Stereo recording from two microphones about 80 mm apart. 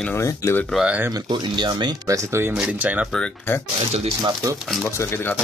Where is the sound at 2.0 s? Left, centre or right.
Right.